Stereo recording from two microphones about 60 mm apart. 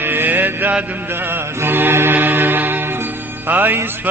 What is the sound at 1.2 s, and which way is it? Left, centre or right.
Chant, right.